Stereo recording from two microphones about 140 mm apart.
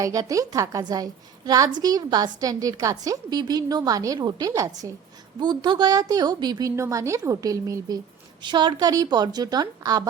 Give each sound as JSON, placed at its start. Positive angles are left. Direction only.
{"t": 0.0, "sound": "a woman's voice", "side_deg": -25}